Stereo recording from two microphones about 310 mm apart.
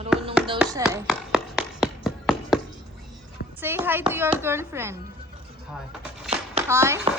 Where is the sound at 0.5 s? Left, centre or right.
Centre.